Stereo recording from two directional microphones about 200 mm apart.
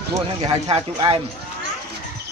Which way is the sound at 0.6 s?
30° right (ahead or behind).